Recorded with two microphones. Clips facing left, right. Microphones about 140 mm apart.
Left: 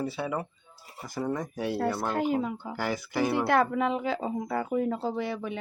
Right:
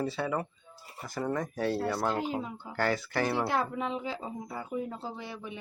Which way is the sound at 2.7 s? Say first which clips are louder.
Right 2 dB; 10° left (ahead or behind).